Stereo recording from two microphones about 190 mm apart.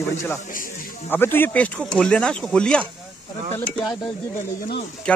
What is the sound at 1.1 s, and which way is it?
Speech, 10° left (ahead or behind).